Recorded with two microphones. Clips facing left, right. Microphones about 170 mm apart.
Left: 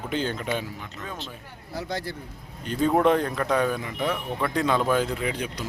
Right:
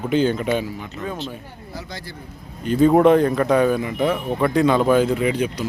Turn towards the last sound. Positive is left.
turn(degrees=-5)  # may be behind; listen again after turning